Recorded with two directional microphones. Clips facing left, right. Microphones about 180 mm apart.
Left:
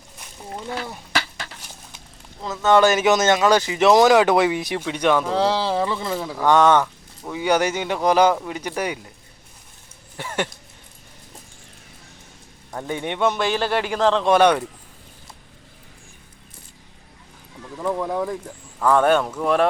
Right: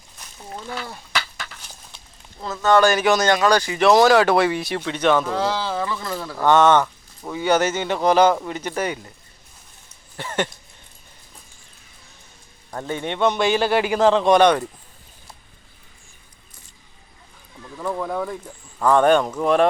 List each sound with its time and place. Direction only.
0.5 s speech: 15° left (ahead or behind)
1.1 s a sound: 30° left (ahead or behind)
2.6 s speech: 20° left (ahead or behind)
5.3 s speech: 30° left (ahead or behind); by 6.8 s 10° left (ahead or behind)
6.8 s a sound: centre (ahead or behind)
7.4 s speech: 10° left (ahead or behind)
10.2 s speech: 10° left (ahead or behind)
12.7 s a man's voice: 15° left (ahead or behind); by 14.3 s 5° right (ahead or behind)
14.3 s speech: 5° left (ahead or behind)
17.7 s a man's voice: 10° left (ahead or behind)